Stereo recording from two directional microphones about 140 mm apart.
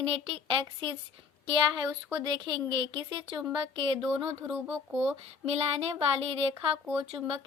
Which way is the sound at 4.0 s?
5° right (ahead or behind).